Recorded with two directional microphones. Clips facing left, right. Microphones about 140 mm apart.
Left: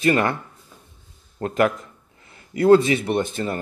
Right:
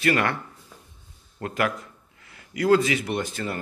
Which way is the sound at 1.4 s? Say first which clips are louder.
Left 6 dB; 30° left (ahead or behind).